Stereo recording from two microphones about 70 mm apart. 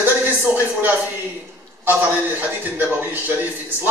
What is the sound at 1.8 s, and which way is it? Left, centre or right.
A man's voice, right.